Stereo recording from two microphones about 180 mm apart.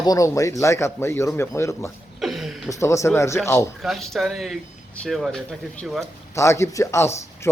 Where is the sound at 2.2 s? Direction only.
Centre (ahead or behind).